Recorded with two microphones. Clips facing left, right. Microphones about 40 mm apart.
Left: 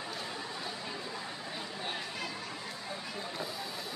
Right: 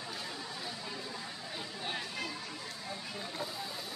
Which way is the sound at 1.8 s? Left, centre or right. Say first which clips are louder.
Right 1 dB; centre.